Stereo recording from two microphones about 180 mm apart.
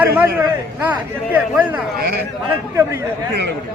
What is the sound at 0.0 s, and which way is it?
Speech, 10° right (ahead or behind).